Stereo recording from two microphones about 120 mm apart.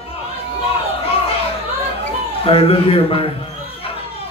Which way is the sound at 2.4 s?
50° left (ahead or behind).